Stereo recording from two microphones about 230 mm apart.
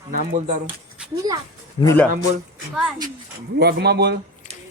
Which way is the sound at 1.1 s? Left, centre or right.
Centre.